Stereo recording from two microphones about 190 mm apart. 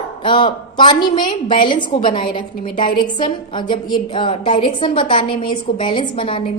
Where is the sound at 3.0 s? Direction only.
25° left (ahead or behind).